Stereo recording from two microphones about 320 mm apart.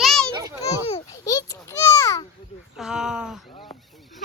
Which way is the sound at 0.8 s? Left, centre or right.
Centre.